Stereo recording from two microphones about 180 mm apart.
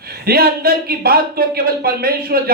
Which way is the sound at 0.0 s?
60° right (ahead or behind).